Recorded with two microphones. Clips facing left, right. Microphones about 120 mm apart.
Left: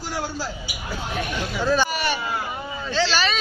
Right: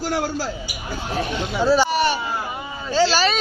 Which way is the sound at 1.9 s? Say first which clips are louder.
Right 5 dB; 30° right (ahead or behind).